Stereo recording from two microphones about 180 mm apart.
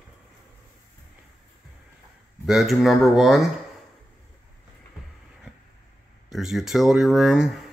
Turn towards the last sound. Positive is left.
turn(degrees=0)  # may be behind; listen again after turning